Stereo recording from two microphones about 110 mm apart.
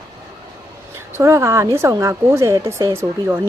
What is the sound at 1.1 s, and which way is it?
Speech, 25° right (ahead or behind).